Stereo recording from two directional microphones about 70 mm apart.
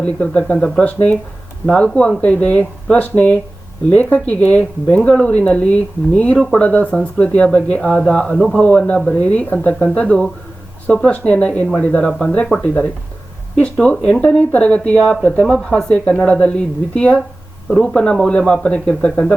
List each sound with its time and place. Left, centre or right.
0.0 s speech: centre